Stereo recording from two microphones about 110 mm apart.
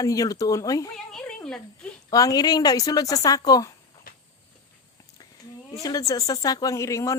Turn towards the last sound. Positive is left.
turn(degrees=25)  # may be behind; listen again after turning